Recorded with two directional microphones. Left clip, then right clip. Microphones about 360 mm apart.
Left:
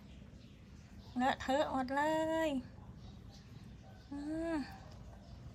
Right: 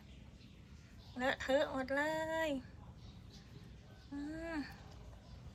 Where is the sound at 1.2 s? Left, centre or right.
Centre.